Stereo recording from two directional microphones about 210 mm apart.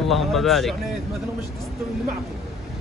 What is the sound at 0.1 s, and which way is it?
Speech, centre (ahead or behind).